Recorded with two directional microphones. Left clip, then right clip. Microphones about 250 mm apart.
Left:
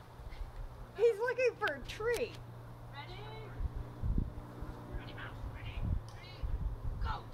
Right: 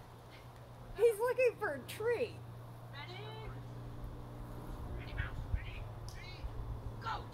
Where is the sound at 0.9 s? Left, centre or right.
Left.